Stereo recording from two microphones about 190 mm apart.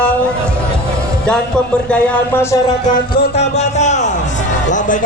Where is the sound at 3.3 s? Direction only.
35° left (ahead or behind).